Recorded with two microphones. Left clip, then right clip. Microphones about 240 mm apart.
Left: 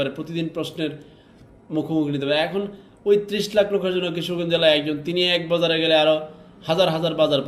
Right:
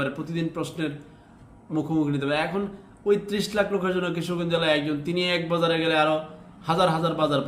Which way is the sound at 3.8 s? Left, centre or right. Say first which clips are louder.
Left 3 dB; right.